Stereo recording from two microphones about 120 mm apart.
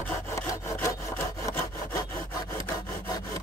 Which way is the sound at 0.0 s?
15° left (ahead or behind).